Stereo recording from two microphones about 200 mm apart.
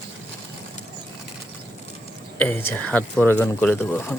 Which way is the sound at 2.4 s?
10° left (ahead or behind).